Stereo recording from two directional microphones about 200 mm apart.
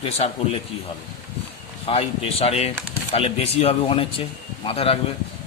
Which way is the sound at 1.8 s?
30° left (ahead or behind).